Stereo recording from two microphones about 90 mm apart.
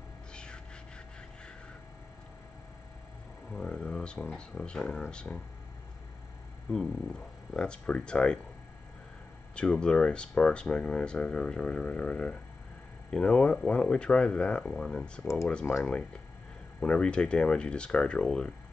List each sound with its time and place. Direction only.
0.3 s music: 10° left (ahead or behind)
3.5 s speech: 10° left (ahead or behind)
6.7 s speech: 5° left (ahead or behind)
9.6 s speech: 10° left (ahead or behind)